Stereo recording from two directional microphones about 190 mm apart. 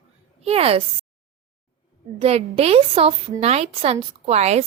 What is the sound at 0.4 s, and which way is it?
Speech, 30° right (ahead or behind).